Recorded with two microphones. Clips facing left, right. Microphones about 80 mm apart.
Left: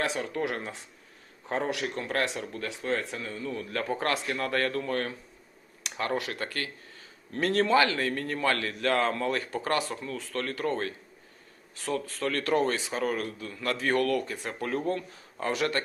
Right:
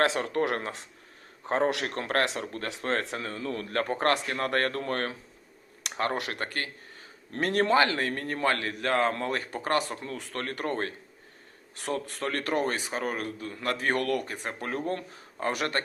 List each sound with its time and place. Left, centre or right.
0.0 s speech: right
2.4 s speech: right
2.6 s speech: right
3.2 s speech: right
6.1 s speech: right
6.4 s a man's voice: right